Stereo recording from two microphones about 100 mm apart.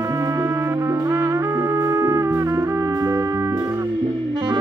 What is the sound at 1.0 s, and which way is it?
Music, 30° right (ahead or behind).